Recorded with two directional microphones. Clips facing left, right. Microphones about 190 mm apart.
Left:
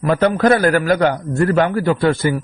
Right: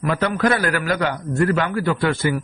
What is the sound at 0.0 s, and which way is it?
A man's voice, 40° left (ahead or behind).